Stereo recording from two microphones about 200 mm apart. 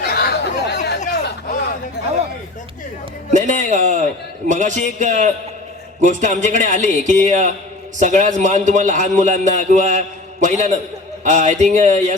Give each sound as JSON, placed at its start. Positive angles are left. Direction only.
{"t": 0.0, "sound": "chatter", "side_deg": 50}
{"t": 1.0, "sound": "a sound", "side_deg": 55}
{"t": 3.3, "sound": "a man's voice", "side_deg": -40}